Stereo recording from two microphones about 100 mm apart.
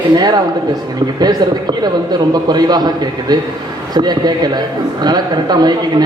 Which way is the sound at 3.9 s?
45° right (ahead or behind).